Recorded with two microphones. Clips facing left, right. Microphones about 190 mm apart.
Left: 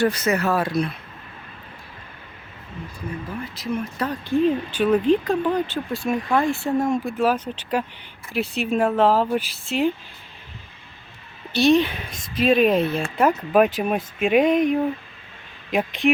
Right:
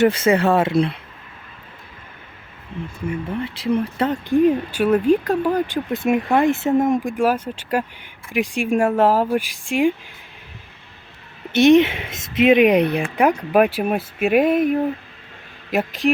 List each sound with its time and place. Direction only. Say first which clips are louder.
0.0 s speech: right 5 dB; 25° right (ahead or behind)
3.4 s speech: right 7 dB; 30° right (ahead or behind); by 9.9 s 15° right (ahead or behind)
11.5 s speech: right 5 dB; 20° right (ahead or behind); by 16.1 s centre (ahead or behind)